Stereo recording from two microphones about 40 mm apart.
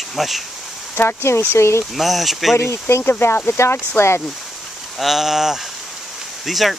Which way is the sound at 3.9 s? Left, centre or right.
Left.